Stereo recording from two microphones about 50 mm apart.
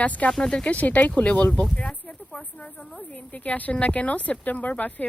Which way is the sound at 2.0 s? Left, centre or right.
Left.